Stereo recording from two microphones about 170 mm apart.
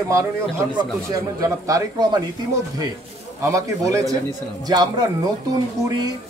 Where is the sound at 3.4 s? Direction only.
20° right (ahead or behind).